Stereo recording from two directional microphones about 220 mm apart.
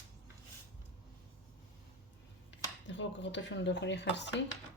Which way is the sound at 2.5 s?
55° left (ahead or behind).